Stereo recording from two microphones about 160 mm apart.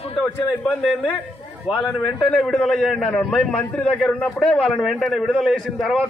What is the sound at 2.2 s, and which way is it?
A man's voice, 5° left (ahead or behind).